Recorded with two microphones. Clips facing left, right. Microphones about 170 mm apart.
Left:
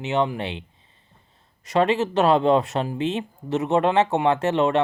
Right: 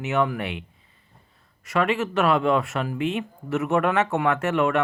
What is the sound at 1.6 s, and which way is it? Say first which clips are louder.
Speech: left 3 dB; 35° left (ahead or behind).